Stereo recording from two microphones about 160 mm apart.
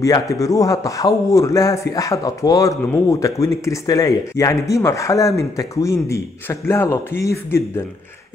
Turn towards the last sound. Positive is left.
turn(degrees=15)  # may be behind; listen again after turning